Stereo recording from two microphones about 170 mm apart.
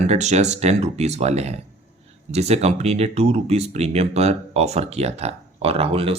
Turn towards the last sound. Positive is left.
turn(degrees=-35)  # may be behind; listen again after turning